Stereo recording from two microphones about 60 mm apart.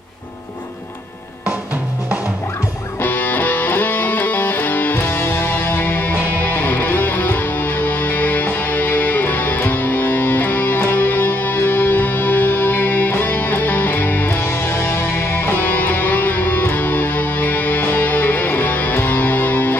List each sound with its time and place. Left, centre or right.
3.0 s music: left